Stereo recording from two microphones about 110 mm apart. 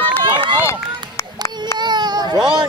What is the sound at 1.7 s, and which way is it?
Baby cry, 40° right (ahead or behind).